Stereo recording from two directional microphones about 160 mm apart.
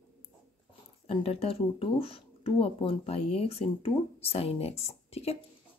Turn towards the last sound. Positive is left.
turn(degrees=40)  # may be behind; listen again after turning